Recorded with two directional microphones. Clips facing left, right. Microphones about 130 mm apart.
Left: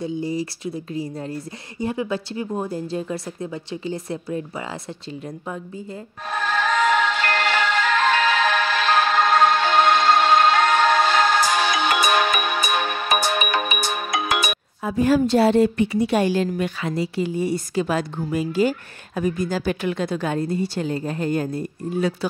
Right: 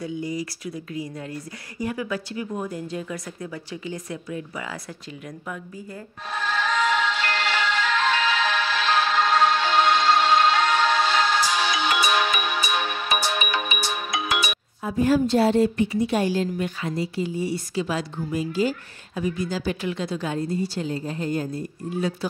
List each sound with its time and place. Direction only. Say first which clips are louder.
0.0 s speech: left 4 dB; 30° left (ahead or behind)
6.3 s music: left 3 dB; 50° left (ahead or behind)
14.8 s a woman's voice: left 2 dB; 90° left; by 22.1 s 65° left (ahead or behind)